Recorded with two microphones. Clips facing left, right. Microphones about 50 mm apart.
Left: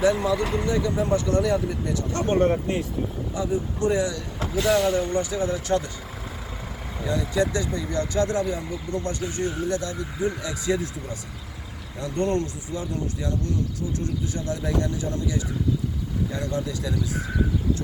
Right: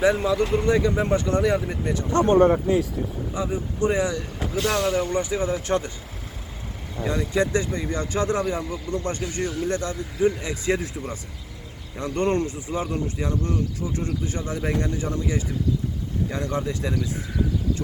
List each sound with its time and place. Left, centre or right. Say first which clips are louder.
0.0 s speech: right 1 dB; right
3.3 s speech: left 1 dB; right
4.6 s speech: left 3 dB; centre
4.9 s speech: right 1 dB; right
7.1 s speech: right 1 dB; right
11.9 s speech: right 2 dB; right